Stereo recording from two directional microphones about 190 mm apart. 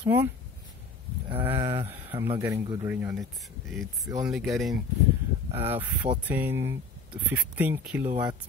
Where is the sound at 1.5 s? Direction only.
30° right (ahead or behind).